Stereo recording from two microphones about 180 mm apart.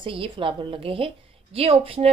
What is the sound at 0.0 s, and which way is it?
A woman's voice, 30° right (ahead or behind).